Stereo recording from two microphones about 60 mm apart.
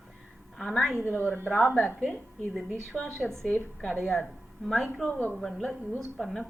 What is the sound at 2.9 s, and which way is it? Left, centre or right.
Speech, centre.